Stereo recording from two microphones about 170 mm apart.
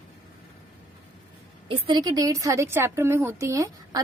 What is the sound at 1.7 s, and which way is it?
A woman's voice, 25° right (ahead or behind).